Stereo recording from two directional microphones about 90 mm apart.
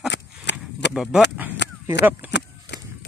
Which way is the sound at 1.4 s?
20° right (ahead or behind).